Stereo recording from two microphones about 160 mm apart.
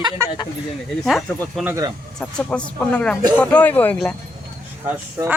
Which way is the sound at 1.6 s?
20° right (ahead or behind).